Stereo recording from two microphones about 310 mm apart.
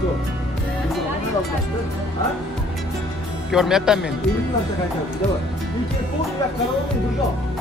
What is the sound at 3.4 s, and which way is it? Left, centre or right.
Speech, centre.